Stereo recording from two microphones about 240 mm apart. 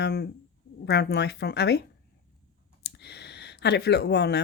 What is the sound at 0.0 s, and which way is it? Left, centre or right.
A woman's voice, left.